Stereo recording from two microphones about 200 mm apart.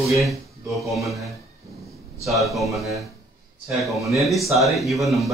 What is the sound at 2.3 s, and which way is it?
A man's voice, centre (ahead or behind).